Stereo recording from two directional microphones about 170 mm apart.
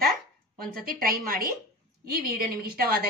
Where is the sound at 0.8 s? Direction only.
60° right (ahead or behind).